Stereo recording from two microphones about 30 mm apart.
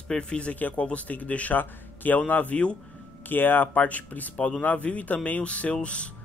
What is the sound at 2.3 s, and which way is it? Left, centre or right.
Speech, left.